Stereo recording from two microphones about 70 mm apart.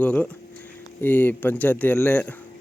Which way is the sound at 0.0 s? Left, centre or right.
Centre.